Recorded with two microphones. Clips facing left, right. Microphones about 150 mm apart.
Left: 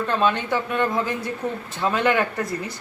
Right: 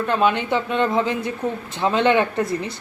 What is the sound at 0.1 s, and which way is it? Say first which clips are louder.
Speech: right 3 dB; 15° right (ahead or behind).